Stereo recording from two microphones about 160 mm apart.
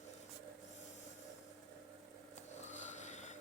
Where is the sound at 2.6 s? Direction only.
45° left (ahead or behind).